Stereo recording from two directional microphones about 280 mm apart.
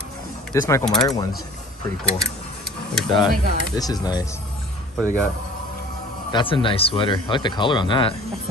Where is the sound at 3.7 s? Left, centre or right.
Centre.